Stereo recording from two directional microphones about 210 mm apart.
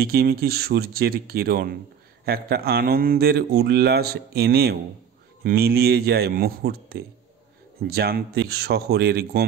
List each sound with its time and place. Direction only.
0.0 s speech: 50° right (ahead or behind)